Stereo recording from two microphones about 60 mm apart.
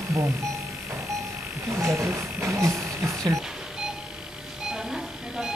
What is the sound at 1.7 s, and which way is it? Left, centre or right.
Speech, right.